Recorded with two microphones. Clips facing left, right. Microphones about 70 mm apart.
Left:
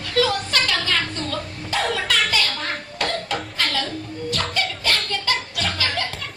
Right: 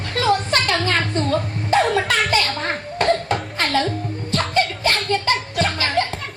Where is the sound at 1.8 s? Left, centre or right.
Centre.